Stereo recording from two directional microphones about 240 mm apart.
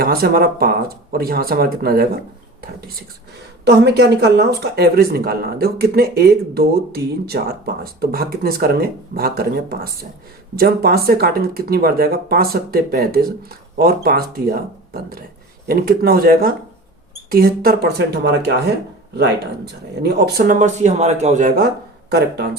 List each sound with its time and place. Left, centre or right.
0.0 s speech: right
3.6 s speech: right